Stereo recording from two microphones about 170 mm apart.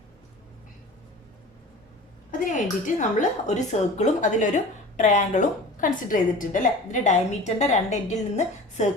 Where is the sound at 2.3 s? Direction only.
50° left (ahead or behind).